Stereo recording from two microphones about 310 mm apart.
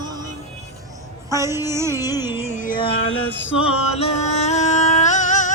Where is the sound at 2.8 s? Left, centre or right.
Centre.